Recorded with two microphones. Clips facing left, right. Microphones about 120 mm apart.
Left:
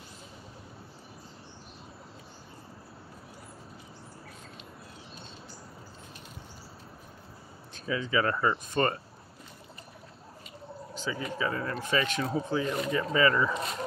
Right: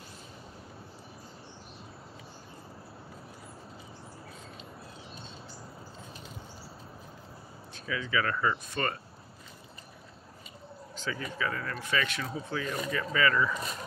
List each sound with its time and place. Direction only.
7.8 s speech: 30° left (ahead or behind)
11.0 s speech: 20° left (ahead or behind)